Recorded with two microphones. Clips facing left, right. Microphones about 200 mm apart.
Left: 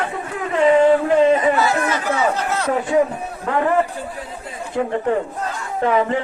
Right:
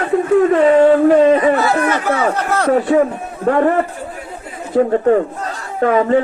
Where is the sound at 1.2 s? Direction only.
45° right (ahead or behind).